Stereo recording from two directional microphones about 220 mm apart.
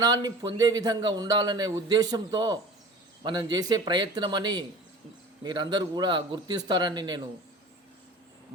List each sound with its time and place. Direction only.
0.0 s a man's voice: 15° right (ahead or behind)